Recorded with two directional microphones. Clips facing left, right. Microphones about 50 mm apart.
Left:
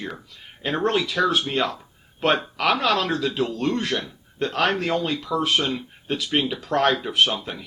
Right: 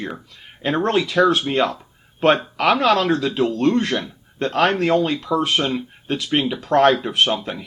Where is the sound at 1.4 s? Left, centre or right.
Centre.